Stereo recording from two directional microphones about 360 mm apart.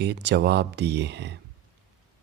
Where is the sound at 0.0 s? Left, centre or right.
Right.